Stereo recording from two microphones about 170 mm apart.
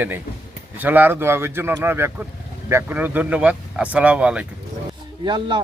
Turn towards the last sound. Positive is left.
turn(degrees=-25)  # may be behind; listen again after turning